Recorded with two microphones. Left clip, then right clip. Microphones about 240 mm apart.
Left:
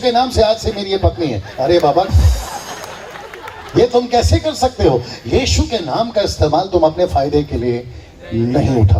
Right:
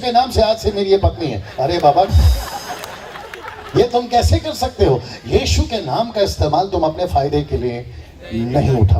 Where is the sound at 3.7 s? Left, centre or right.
Right.